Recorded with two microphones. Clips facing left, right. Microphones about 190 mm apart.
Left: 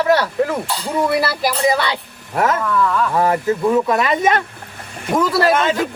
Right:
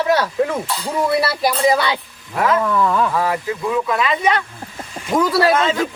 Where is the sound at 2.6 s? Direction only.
20° right (ahead or behind).